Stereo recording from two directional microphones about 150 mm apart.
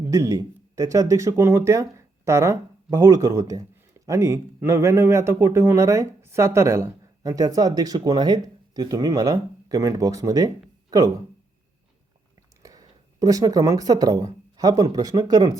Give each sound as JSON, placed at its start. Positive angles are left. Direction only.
{"t": 0.1, "sound": "speech", "side_deg": -20}
{"t": 10.8, "sound": "a sound", "side_deg": -25}
{"t": 12.6, "sound": "speech", "side_deg": -25}